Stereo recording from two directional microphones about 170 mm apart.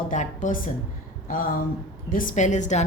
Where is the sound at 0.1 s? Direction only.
50° left (ahead or behind).